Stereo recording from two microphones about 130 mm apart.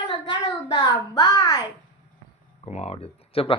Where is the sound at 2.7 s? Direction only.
55° left (ahead or behind).